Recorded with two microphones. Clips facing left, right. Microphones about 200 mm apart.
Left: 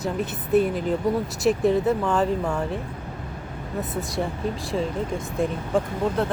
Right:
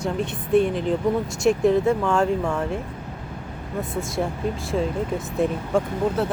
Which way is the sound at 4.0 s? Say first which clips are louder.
Right 2 dB; centre (ahead or behind).